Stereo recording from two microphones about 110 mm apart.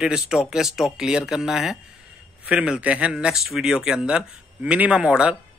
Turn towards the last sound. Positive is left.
turn(degrees=-10)  # may be behind; listen again after turning